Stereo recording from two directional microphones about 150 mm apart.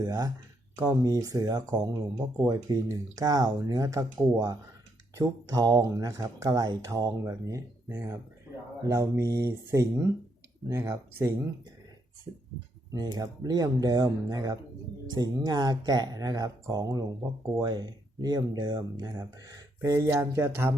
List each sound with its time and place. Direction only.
0.0 s speech: 25° right (ahead or behind)
12.9 s speech: 25° right (ahead or behind)